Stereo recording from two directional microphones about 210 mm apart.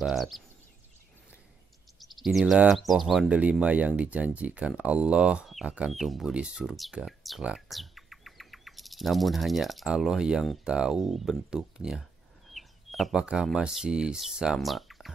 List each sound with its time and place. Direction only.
0.0 s speech: centre (ahead or behind)
2.0 s speech: centre (ahead or behind)